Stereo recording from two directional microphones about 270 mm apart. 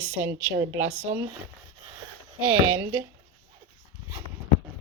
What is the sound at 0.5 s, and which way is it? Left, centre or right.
Speech, centre.